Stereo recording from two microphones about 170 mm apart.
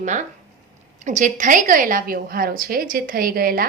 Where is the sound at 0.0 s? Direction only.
45° right (ahead or behind).